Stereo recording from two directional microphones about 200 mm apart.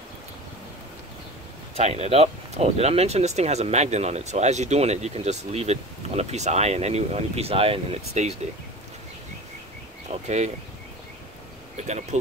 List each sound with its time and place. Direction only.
1.8 s speech: 30° right (ahead or behind)
10.2 s speech: 35° right (ahead or behind)
11.7 s speech: 35° right (ahead or behind)